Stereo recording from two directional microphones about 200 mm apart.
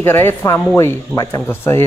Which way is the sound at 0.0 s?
10° left (ahead or behind).